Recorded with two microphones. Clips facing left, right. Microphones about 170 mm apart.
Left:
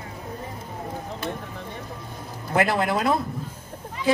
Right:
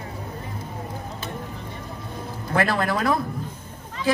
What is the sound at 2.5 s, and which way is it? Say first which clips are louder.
Speech: left 1 dB; 20° left (ahead or behind).